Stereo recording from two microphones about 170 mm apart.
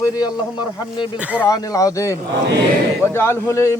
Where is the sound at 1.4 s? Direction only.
20° left (ahead or behind).